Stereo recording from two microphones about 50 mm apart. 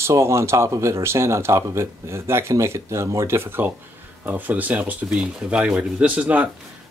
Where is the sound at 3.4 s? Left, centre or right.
Right.